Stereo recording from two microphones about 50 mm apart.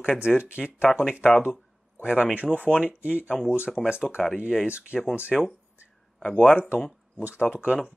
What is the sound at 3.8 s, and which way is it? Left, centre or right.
Speech, centre.